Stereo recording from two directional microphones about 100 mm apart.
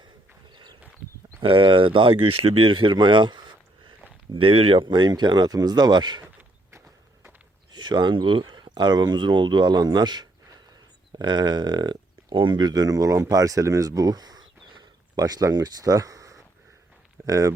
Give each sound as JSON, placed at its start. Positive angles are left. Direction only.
{"t": 0.5, "sound": "a sound", "side_deg": -50}
{"t": 1.4, "sound": "speech", "side_deg": -60}
{"t": 4.4, "sound": "speech", "side_deg": -70}
{"t": 7.7, "sound": "speech", "side_deg": -50}
{"t": 12.3, "sound": "speech", "side_deg": -55}